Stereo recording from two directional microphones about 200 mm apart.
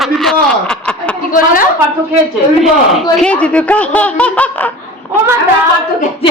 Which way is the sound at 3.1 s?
5° left (ahead or behind).